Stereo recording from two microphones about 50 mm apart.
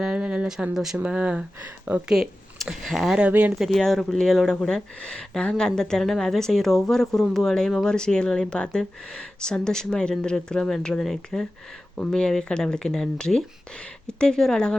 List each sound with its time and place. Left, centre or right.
0.0 s a sound: centre
0.7 s speech: centre
0.9 s speech: right
2.0 s speech: centre